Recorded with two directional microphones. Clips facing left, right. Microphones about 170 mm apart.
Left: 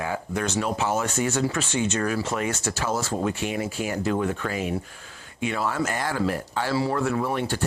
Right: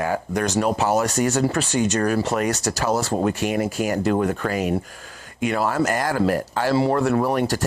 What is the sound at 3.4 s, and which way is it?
Speech, 75° right (ahead or behind).